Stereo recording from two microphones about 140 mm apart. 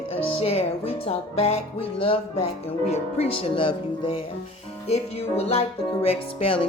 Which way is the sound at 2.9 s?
45° left (ahead or behind).